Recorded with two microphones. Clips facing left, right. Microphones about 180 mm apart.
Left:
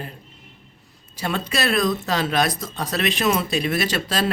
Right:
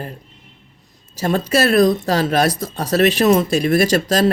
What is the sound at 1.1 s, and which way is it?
Speech, 40° right (ahead or behind).